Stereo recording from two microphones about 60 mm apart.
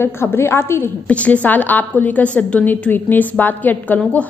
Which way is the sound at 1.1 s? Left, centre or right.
Left.